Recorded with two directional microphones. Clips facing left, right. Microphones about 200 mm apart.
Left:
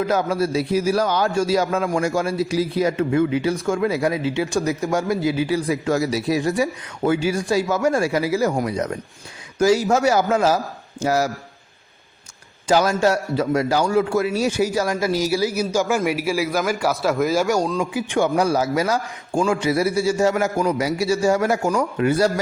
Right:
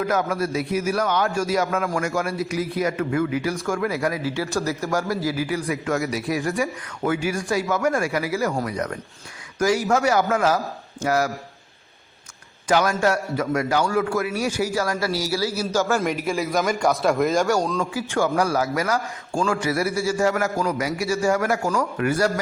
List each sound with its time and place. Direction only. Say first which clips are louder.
0.0 s a man's voice: left 3 dB; 30° left (ahead or behind)
12.6 s a man's voice: left 2 dB; 25° left (ahead or behind); by 17.7 s 5° left (ahead or behind)
17.7 s a man's voice: left 2 dB; 20° left (ahead or behind)